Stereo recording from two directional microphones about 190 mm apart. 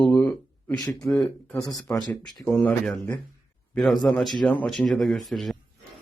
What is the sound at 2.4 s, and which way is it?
Speech, 5° left (ahead or behind).